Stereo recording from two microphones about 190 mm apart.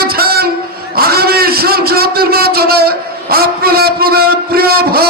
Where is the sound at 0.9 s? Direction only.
55° right (ahead or behind).